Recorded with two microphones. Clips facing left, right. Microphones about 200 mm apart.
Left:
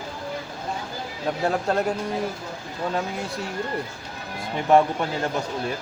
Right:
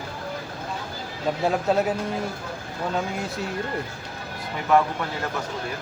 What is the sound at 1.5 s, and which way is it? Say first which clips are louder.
Speech: right 1 dB; centre (ahead or behind).